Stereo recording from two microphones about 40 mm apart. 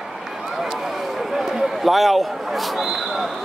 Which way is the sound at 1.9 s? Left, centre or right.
Centre.